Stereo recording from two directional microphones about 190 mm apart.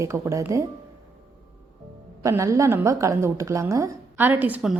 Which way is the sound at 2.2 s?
15° right (ahead or behind).